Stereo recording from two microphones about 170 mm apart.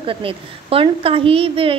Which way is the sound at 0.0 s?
30° right (ahead or behind).